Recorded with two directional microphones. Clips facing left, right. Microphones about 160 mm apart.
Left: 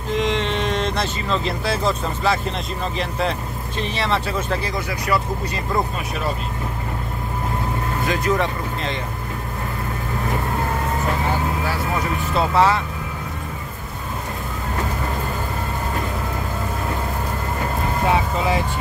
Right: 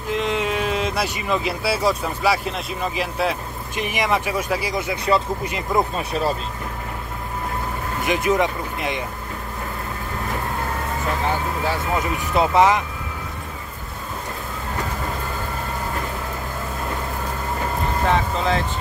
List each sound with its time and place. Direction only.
0.1 s speech: 5° right (ahead or behind)
4.7 s speech: 25° right (ahead or behind)
8.0 s speech: 20° right (ahead or behind)
11.9 s speech: 20° right (ahead or behind)
18.0 s speech: 10° left (ahead or behind)